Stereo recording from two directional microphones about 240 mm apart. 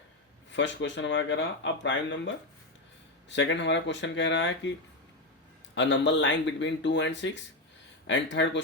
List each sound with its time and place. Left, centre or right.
0.5 s speech: left
5.7 s speech: left